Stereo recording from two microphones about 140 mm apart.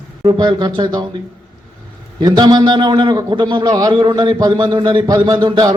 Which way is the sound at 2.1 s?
30° right (ahead or behind).